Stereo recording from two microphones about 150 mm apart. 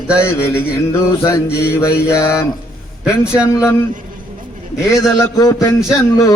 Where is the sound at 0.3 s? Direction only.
15° left (ahead or behind).